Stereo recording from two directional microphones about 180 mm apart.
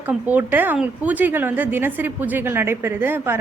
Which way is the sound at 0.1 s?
10° right (ahead or behind).